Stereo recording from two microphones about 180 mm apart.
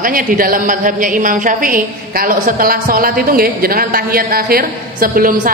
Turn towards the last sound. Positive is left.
turn(degrees=-50)  # may be behind; listen again after turning